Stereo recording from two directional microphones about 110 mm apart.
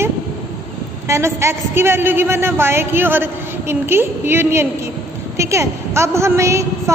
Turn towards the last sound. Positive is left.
turn(degrees=-25)  # may be behind; listen again after turning